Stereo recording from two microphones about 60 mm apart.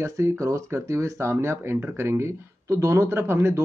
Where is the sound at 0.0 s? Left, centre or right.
Right.